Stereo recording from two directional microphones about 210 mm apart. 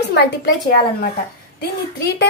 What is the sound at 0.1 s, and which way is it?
Speech, 55° left (ahead or behind).